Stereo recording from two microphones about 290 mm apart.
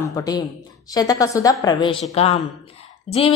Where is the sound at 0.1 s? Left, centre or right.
Centre.